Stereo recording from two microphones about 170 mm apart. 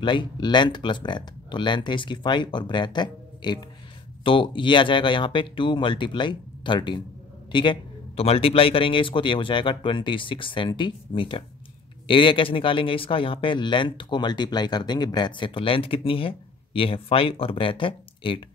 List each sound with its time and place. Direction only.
0.0 s speech: 30° left (ahead or behind)